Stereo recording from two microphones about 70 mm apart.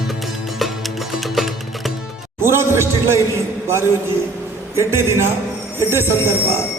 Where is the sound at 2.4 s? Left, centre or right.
Right.